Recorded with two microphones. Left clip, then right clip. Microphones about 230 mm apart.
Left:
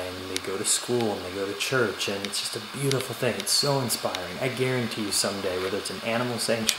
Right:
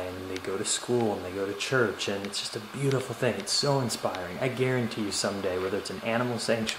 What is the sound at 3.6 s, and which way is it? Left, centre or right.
Speech, right.